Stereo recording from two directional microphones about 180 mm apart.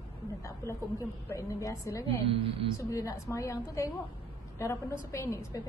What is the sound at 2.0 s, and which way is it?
Speech, 30° right (ahead or behind).